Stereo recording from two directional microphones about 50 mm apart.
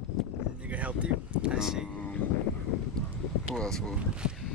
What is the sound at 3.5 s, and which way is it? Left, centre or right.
Speech, centre.